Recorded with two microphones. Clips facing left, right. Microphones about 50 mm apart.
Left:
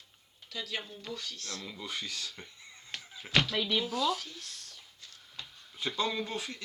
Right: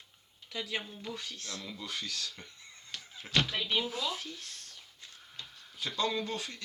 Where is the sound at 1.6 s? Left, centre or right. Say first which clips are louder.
Left 1 dB; centre.